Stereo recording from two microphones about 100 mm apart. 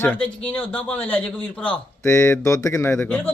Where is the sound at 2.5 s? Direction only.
35° left (ahead or behind).